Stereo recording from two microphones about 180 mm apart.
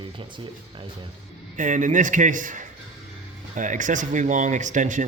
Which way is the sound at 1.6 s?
45° right (ahead or behind).